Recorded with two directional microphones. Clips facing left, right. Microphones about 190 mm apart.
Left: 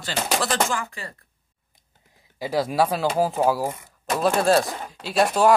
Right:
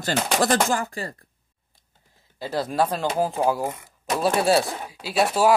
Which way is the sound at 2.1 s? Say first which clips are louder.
Left 3 dB; 15° left (ahead or behind).